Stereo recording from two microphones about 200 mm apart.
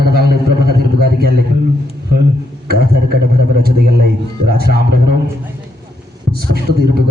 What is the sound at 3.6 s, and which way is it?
A man's voice, 50° right (ahead or behind).